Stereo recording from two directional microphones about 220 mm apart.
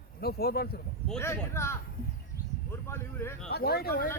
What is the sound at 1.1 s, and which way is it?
Speech, 10° left (ahead or behind).